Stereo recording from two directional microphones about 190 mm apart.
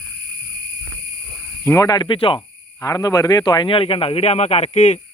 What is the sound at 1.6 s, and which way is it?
Speech, 15° left (ahead or behind).